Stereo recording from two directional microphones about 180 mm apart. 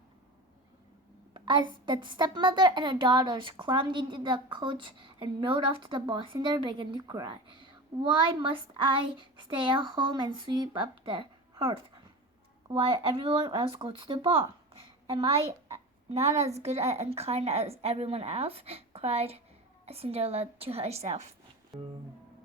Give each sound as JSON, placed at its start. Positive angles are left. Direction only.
{"t": 1.3, "sound": "a woman's voice", "side_deg": -25}
{"t": 9.6, "sound": "a woman's voice", "side_deg": -25}
{"t": 21.7, "sound": "music", "side_deg": 0}